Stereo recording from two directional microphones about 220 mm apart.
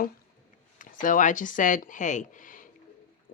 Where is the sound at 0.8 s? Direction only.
35° left (ahead or behind).